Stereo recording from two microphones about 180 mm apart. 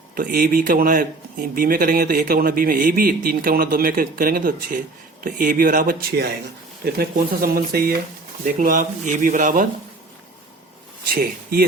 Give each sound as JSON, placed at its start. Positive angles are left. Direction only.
{"t": 0.1, "sound": "speech", "side_deg": -50}
{"t": 11.1, "sound": "speech", "side_deg": -55}